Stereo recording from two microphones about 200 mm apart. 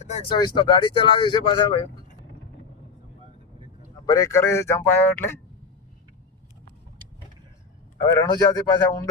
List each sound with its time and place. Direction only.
0.0 s speech: 30° left (ahead or behind)
4.0 s a man's voice: 20° left (ahead or behind)
8.1 s speech: 20° left (ahead or behind)